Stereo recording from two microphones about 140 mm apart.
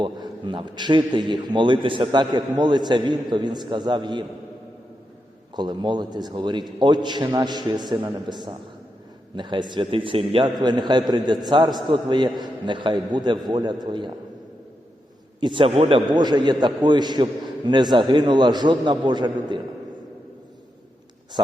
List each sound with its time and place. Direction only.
0.0 s a man's voice: 35° right (ahead or behind)
5.5 s a man's voice: 30° right (ahead or behind)
15.4 s a man's voice: 35° right (ahead or behind)